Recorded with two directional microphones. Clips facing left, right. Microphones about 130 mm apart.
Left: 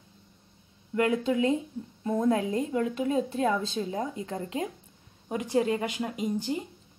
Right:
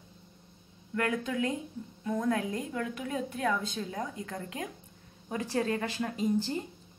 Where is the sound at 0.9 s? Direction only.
20° left (ahead or behind).